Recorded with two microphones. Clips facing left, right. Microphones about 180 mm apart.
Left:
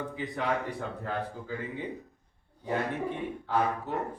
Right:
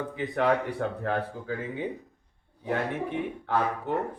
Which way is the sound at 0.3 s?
65° right (ahead or behind).